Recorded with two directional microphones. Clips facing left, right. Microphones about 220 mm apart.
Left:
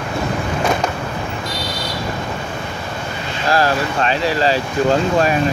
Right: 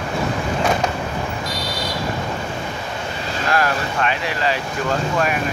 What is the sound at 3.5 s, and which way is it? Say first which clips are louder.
Vehicle: left 4 dB; 30° left (ahead or behind).